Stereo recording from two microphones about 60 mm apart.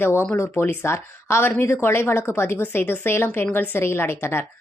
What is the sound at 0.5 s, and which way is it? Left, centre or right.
A woman's voice, left.